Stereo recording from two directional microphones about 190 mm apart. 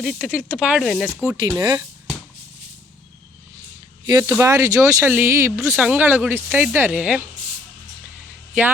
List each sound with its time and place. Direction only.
0.0 s speech: 5° right (ahead or behind)
1.1 s speech: 15° right (ahead or behind)
4.0 s speech: 15° right (ahead or behind)